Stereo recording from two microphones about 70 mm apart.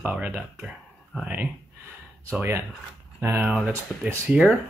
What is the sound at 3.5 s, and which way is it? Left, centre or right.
Speech, centre.